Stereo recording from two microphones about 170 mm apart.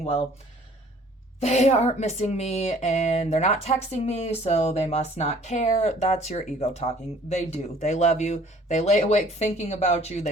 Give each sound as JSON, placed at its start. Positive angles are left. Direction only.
{"t": 1.4, "sound": "a woman's voice", "side_deg": 40}